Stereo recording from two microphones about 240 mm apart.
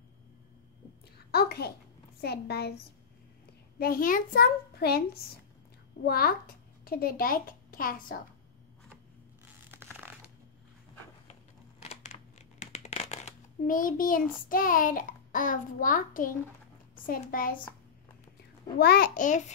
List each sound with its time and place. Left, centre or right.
1.1 s a sound: left
2.2 s a child's voice: left
3.8 s a child's voice: left
6.0 s a woman's voice: left
9.7 s a sound: centre
11.8 s crumpling: left
17.0 s a child's voice: left
18.8 s a child's voice: left